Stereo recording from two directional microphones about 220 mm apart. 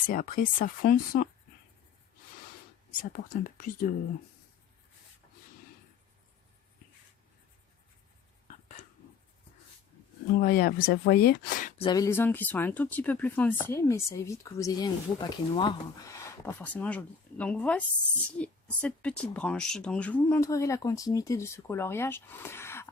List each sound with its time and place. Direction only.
0.1 s speech: 40° left (ahead or behind)
3.0 s speech: 40° left (ahead or behind)
10.4 s speech: 40° left (ahead or behind)
11.8 s speech: 20° left (ahead or behind)